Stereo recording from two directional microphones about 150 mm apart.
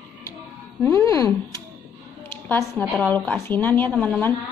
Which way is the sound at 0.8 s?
20° left (ahead or behind).